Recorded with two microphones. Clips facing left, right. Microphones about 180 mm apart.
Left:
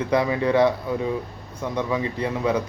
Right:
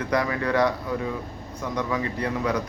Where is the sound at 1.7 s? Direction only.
25° left (ahead or behind).